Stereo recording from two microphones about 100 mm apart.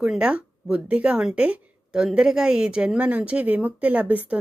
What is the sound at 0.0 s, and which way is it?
Speech, 10° right (ahead or behind).